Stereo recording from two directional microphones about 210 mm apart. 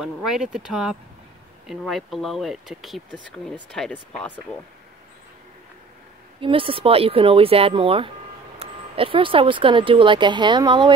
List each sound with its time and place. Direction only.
0.0 s speech: centre (ahead or behind)
6.4 s speech: 25° right (ahead or behind)